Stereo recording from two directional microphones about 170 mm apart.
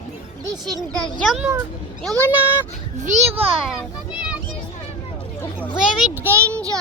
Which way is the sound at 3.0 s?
40° right (ahead or behind).